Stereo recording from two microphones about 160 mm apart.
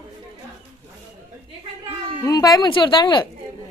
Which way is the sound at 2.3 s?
25° left (ahead or behind).